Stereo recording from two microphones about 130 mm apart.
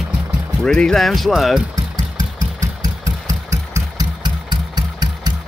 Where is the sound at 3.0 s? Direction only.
25° right (ahead or behind).